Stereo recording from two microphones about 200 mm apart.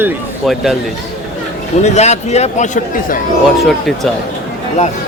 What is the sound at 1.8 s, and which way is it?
A man's voice, 35° left (ahead or behind).